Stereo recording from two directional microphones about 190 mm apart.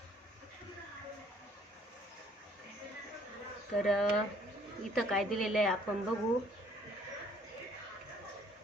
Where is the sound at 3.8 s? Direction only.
Centre (ahead or behind).